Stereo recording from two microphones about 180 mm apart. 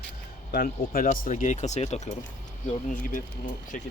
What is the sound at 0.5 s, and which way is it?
Speech, 55° left (ahead or behind).